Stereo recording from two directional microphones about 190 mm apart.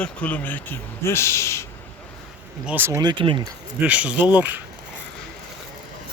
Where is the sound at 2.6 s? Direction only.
10° right (ahead or behind).